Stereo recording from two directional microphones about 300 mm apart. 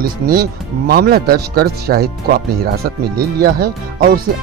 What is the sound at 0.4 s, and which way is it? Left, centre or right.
Speech, right.